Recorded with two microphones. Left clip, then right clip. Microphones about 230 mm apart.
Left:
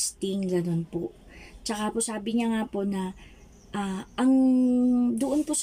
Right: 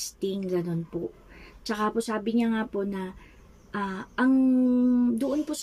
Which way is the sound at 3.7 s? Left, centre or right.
Centre.